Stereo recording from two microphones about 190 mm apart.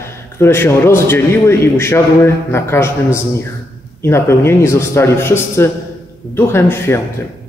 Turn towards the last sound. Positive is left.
turn(degrees=10)  # may be behind; listen again after turning